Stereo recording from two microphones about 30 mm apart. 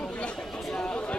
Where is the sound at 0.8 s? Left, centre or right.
Left.